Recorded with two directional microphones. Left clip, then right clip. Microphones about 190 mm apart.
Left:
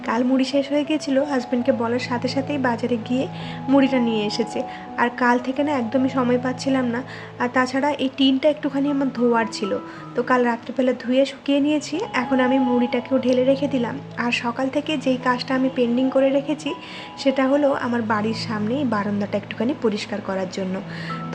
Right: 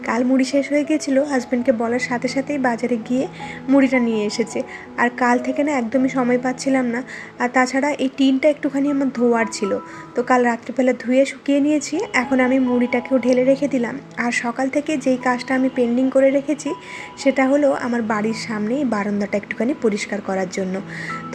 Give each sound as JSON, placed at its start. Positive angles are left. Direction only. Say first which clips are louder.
{"t": 0.1, "sound": "a woman's voice", "louder": "right 2 dB", "side_deg": -15}